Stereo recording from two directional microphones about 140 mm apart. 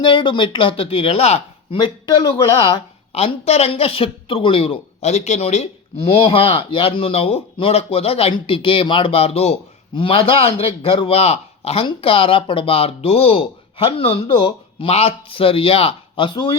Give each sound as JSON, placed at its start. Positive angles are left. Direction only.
{"t": 0.0, "sound": "speech", "side_deg": 35}
{"t": 3.1, "sound": "a man's voice", "side_deg": 45}